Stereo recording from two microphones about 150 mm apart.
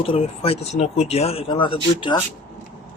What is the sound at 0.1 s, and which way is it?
Speech, 40° left (ahead or behind).